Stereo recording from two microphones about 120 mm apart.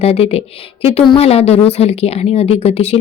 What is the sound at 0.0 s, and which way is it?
A woman's voice, 60° left (ahead or behind).